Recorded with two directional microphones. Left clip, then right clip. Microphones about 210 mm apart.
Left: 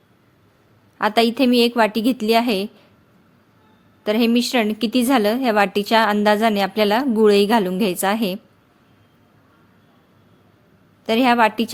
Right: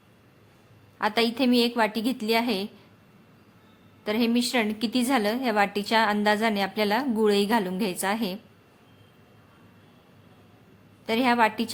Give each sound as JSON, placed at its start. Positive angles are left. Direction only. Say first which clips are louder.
{"t": 0.9, "sound": "a woman's voice", "louder": "left 7 dB", "side_deg": 30}
{"t": 4.0, "sound": "a woman's voice", "louder": "left 7 dB", "side_deg": 30}
{"t": 11.0, "sound": "a woman's voice", "louder": "left 6 dB", "side_deg": 30}